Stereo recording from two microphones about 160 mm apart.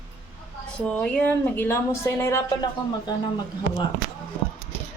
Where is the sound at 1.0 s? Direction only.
10° left (ahead or behind).